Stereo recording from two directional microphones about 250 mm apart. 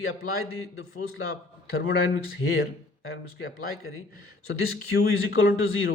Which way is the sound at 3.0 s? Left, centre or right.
Left.